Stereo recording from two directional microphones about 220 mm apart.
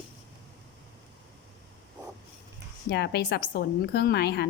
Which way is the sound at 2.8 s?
50° left (ahead or behind).